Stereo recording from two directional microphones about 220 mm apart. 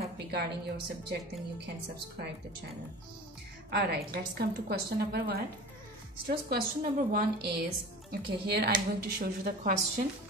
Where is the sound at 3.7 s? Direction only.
45° right (ahead or behind).